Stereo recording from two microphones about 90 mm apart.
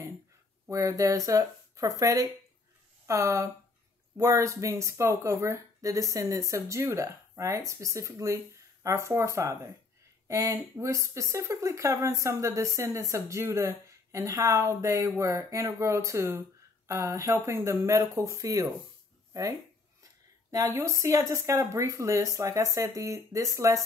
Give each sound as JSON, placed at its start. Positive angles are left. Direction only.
{"t": 0.7, "sound": "speech", "side_deg": -35}
{"t": 20.5, "sound": "speech", "side_deg": -40}